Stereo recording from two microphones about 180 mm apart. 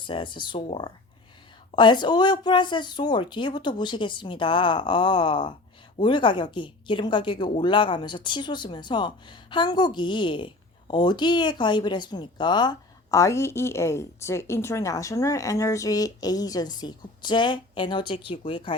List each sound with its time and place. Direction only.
0.0 s a woman's voice: 25° left (ahead or behind)